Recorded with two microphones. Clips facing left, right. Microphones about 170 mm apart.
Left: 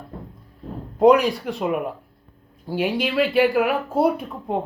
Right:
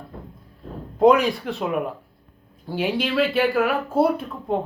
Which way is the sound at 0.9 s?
10° left (ahead or behind).